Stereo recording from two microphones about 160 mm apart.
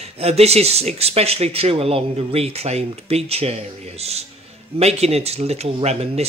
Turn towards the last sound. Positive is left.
turn(degrees=-40)  # may be behind; listen again after turning